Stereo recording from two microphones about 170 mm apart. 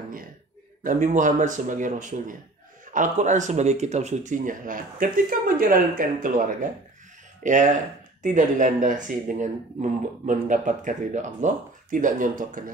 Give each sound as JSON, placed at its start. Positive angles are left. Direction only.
{"t": 0.8, "sound": "speech", "side_deg": -45}